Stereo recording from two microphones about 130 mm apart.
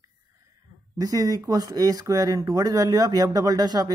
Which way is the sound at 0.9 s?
25° right (ahead or behind).